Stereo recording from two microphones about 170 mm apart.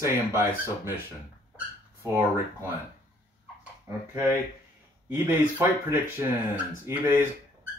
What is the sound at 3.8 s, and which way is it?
Speech, 15° right (ahead or behind).